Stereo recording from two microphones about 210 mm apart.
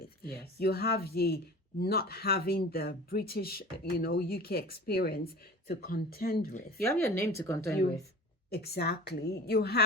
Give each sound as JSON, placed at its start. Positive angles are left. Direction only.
{"t": 0.3, "sound": "speech", "side_deg": 45}
{"t": 6.7, "sound": "speech", "side_deg": 10}
{"t": 8.4, "sound": "speech", "side_deg": 50}